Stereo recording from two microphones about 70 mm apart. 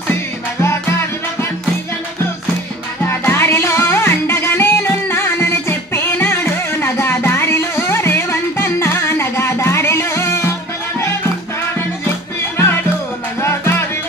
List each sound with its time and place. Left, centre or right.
0.1 s music: left
3.1 s music: left
13.4 s music: left